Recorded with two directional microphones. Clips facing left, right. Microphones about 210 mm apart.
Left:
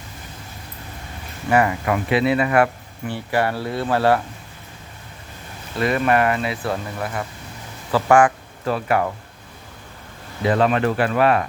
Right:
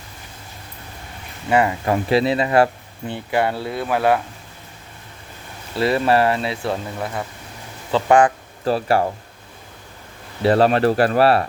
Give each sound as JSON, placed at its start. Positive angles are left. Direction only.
{"t": 1.5, "sound": "speech", "side_deg": -25}
{"t": 3.1, "sound": "speech", "side_deg": -20}
{"t": 5.8, "sound": "speech", "side_deg": -30}
{"t": 6.7, "sound": "speech", "side_deg": -5}
{"t": 7.9, "sound": "speech", "side_deg": -20}
{"t": 8.6, "sound": "speech", "side_deg": -35}
{"t": 10.4, "sound": "speech", "side_deg": -35}